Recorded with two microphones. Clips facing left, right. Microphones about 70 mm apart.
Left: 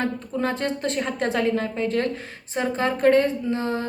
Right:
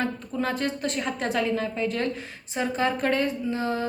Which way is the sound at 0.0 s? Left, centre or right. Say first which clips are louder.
Left 2 dB; left.